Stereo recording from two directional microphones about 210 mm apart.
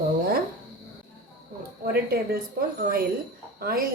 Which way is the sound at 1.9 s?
45° right (ahead or behind).